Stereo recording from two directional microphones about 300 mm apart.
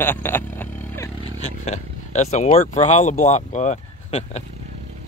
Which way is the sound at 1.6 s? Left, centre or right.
Left.